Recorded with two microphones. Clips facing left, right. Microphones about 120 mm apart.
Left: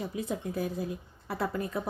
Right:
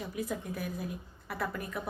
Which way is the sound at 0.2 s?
30° left (ahead or behind).